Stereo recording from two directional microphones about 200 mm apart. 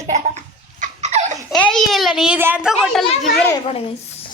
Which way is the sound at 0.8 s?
35° right (ahead or behind).